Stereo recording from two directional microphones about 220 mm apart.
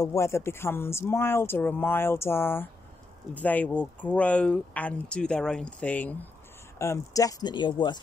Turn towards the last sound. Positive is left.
turn(degrees=20)  # may be behind; listen again after turning